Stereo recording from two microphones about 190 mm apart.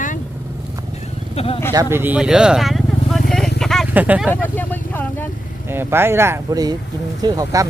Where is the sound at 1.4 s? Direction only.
30° left (ahead or behind).